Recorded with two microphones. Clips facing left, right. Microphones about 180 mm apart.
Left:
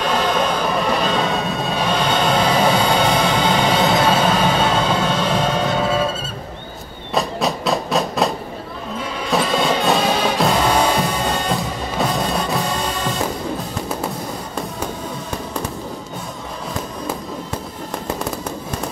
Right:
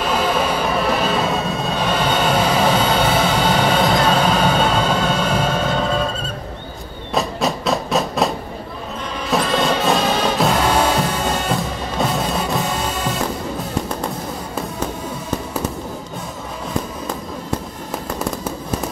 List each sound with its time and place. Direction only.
0.0 s vehicle: 5° right (ahead or behind)
3.0 s music: 5° right (ahead or behind)
4.0 s music: 5° left (ahead or behind)
4.6 s music: 5° right (ahead or behind)
5.8 s music: 5° left (ahead or behind)
7.2 s train: centre (ahead or behind)
9.3 s music: centre (ahead or behind)